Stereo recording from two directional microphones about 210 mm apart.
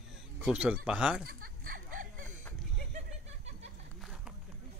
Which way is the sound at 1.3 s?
45° right (ahead or behind).